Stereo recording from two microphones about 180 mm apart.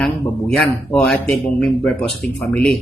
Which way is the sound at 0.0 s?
5° left (ahead or behind).